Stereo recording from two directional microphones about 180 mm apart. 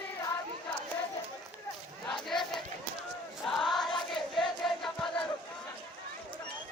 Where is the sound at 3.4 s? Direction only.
Centre (ahead or behind).